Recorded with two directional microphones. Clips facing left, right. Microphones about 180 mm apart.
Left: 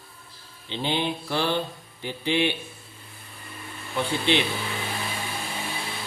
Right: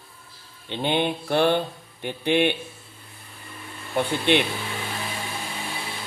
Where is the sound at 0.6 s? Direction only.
55° right (ahead or behind).